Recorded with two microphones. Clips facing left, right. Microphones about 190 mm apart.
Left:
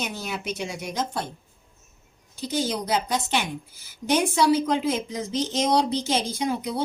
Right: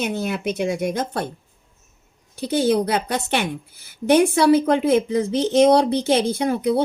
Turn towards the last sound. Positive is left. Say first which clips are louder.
# right 7 dB
turn(degrees=-60)  # may be behind; listen again after turning